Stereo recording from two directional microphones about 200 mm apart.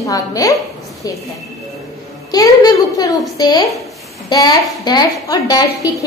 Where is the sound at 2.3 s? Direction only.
20° left (ahead or behind).